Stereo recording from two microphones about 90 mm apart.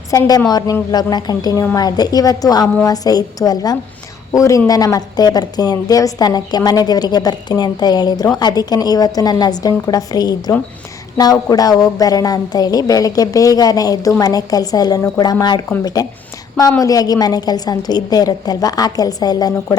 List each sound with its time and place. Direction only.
0.1 s a woman's voice: 40° left (ahead or behind)